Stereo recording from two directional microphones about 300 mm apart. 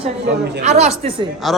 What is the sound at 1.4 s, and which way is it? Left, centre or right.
Speech, centre.